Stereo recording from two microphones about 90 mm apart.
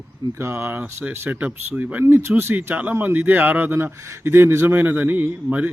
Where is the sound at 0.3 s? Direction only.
30° right (ahead or behind).